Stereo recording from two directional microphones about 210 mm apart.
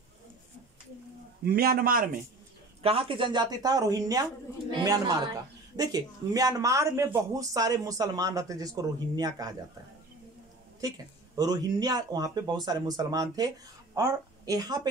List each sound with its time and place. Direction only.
1.5 s a man's voice: 45° right (ahead or behind)
2.8 s speech: 25° right (ahead or behind)
11.3 s a woman's voice: 20° right (ahead or behind)